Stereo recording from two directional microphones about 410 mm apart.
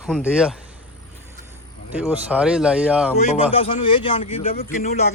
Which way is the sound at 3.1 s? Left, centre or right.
Centre.